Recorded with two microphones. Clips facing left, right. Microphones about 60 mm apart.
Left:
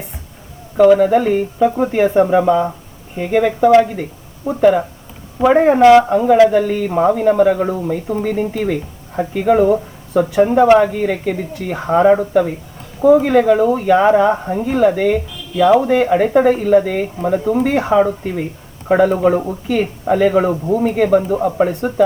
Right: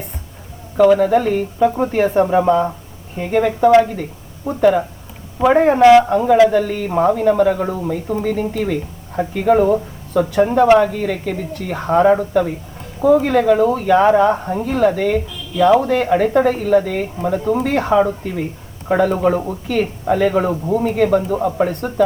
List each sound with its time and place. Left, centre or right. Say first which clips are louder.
0.8 s speech: left 2 dB; centre
2.4 s speech: left 1 dB; centre
3.3 s speech: left 1 dB; centre
17.6 s speech: left 1 dB; centre